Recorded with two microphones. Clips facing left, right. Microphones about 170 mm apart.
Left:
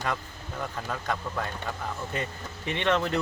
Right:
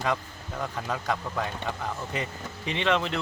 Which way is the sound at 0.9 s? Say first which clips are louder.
Right 2 dB; 10° right (ahead or behind).